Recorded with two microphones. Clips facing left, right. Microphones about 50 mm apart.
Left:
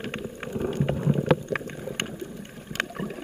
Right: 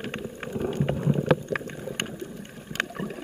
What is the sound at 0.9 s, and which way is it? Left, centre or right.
Boat, centre.